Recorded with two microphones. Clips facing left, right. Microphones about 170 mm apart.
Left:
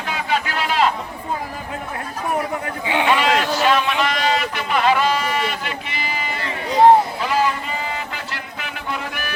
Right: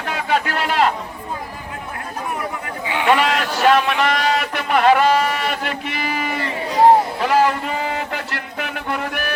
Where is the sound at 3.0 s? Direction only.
65° right (ahead or behind).